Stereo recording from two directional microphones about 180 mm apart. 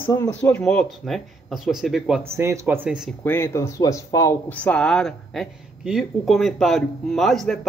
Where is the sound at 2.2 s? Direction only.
15° right (ahead or behind).